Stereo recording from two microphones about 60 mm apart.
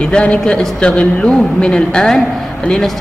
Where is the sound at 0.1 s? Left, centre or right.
Centre.